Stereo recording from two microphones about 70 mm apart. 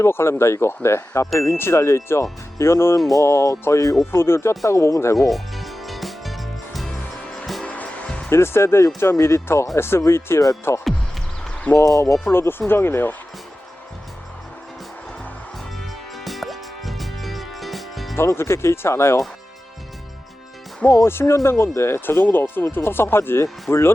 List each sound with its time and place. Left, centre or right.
0.0 s speech: left
4.6 s speech: left
5.3 s music: centre
7.6 s music: centre
8.3 s speech: left
12.2 s speech: left
16.1 s music: centre
18.2 s speech: left
20.9 s speech: left